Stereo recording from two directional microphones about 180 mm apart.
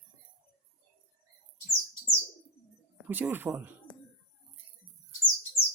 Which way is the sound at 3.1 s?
10° right (ahead or behind).